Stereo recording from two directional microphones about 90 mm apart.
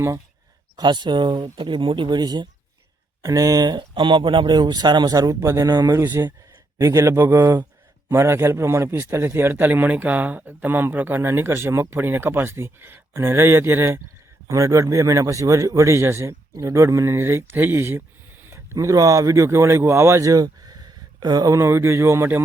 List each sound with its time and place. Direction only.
0.8 s speech: 55° right (ahead or behind); by 14.0 s 25° right (ahead or behind)
14.4 s speech: 40° right (ahead or behind)